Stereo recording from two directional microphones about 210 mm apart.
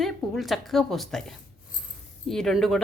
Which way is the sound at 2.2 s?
Centre (ahead or behind).